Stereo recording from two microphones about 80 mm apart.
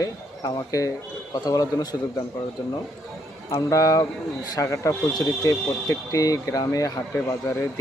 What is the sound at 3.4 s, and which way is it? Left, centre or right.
Speech, left.